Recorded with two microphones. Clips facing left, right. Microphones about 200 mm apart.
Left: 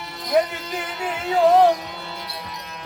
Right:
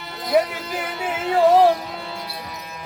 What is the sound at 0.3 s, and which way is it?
Speech, 5° right (ahead or behind).